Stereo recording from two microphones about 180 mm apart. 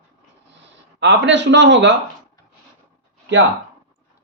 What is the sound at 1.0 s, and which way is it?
Speech, 80° right.